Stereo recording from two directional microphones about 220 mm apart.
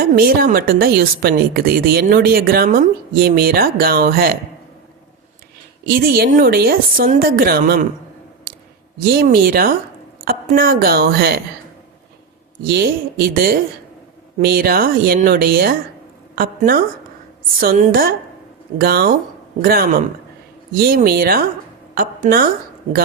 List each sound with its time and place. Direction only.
0.0 s a woman's voice: 45° right (ahead or behind)
5.8 s a woman's voice: 45° right (ahead or behind)
9.0 s a woman's voice: 45° right (ahead or behind)
12.6 s a woman's voice: 45° right (ahead or behind)